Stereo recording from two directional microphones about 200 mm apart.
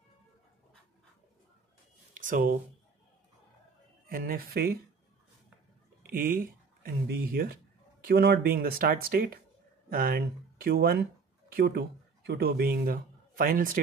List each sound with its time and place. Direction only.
2.1 s speech: 40° right (ahead or behind)
4.1 s speech: 45° right (ahead or behind)
6.0 s speech: 45° right (ahead or behind)